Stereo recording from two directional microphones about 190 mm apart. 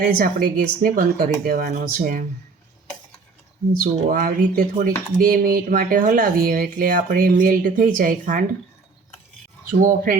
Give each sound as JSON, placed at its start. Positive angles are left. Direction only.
{"t": 0.2, "sound": "speech", "side_deg": -50}
{"t": 3.8, "sound": "speech", "side_deg": -45}
{"t": 9.8, "sound": "speech", "side_deg": -50}